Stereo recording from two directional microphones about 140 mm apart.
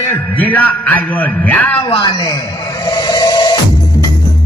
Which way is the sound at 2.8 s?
25° left (ahead or behind).